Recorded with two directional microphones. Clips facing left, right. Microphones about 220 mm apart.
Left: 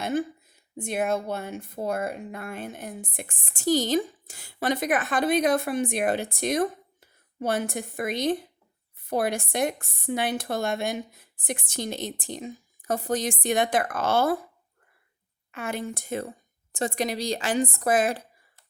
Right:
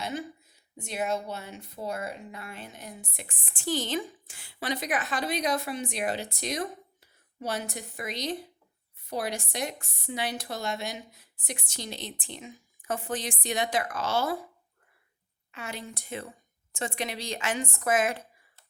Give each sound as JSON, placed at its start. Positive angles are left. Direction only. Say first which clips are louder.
{"t": 0.0, "sound": "a woman's voice", "louder": "left 7 dB", "side_deg": 50}
{"t": 15.5, "sound": "a woman's voice", "louder": "left 8 dB", "side_deg": 55}